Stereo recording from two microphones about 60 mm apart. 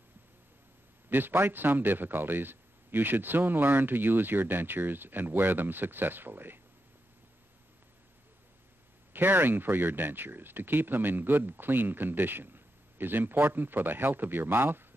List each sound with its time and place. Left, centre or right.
1.1 s speech: right
9.1 s speech: right